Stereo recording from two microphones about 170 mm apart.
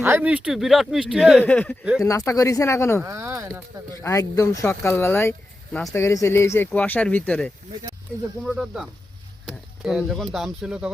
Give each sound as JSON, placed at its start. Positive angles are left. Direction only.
{"t": 0.0, "sound": "speech", "side_deg": -10}
{"t": 1.5, "sound": "speech", "side_deg": 10}
{"t": 3.0, "sound": "speech", "side_deg": -15}
{"t": 4.0, "sound": "speech", "side_deg": 15}